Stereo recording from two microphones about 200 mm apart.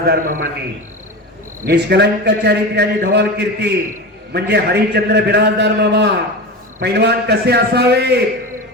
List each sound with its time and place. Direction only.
0.0 s a man's voice: 45° right (ahead or behind)
1.6 s a man's voice: 55° right (ahead or behind)